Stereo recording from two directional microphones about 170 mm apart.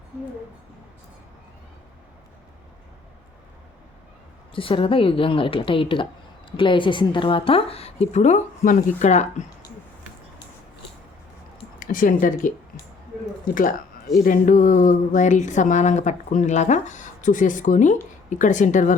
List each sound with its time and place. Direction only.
4.5 s a woman's voice: 30° left (ahead or behind)
11.8 s a woman's voice: 55° left (ahead or behind)